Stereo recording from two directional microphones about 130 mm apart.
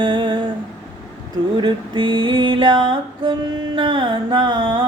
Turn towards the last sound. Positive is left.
turn(degrees=-35)  # may be behind; listen again after turning